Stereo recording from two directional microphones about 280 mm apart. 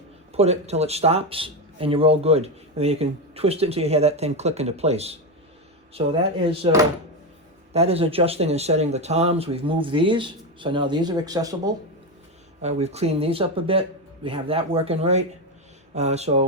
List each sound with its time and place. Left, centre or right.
0.3 s speech: right